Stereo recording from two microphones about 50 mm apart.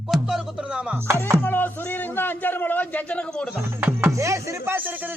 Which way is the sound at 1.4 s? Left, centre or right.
Left.